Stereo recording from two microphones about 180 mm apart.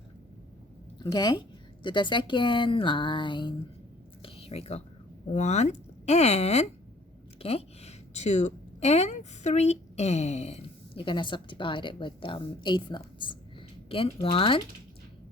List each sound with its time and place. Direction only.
0.9 s a woman's voice: 25° left (ahead or behind)
4.2 s a sound: 30° left (ahead or behind)
5.3 s a woman's voice: 40° left (ahead or behind)